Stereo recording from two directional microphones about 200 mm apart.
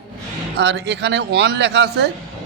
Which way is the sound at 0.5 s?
55° right (ahead or behind).